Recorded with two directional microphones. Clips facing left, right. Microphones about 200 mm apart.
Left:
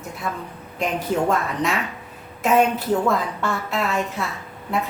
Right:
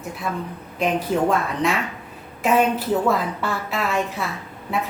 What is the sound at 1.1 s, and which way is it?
A woman's voice, centre (ahead or behind).